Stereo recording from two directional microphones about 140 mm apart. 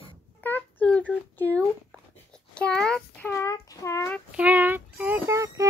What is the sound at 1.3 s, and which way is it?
Speech, 15° left (ahead or behind).